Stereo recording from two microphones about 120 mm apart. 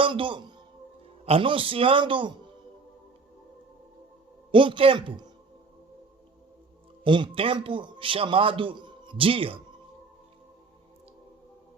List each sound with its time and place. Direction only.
0.0 s a man's voice: 45° right (ahead or behind)
4.5 s a man's voice: 45° right (ahead or behind)
7.0 s a man's voice: 40° right (ahead or behind)